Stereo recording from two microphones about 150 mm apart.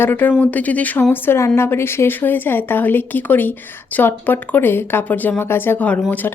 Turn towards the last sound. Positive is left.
turn(degrees=10)  # may be behind; listen again after turning